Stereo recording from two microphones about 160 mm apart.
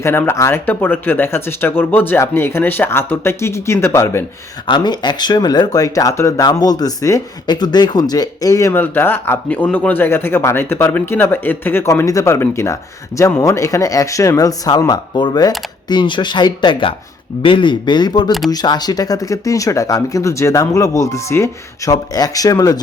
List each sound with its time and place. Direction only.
0.0 s speech: 15° left (ahead or behind)
4.6 s speech: 30° left (ahead or behind)
18.3 s speech: centre (ahead or behind)
18.5 s speech: 25° left (ahead or behind)